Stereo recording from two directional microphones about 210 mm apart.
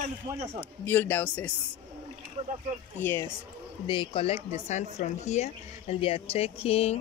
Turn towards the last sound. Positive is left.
turn(degrees=30)  # may be behind; listen again after turning